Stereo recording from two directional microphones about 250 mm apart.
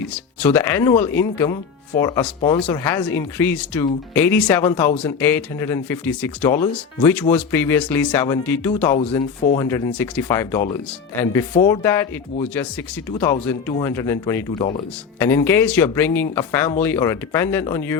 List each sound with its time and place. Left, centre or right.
0.1 s speech: centre
9.0 s speech: left
9.6 s speech: centre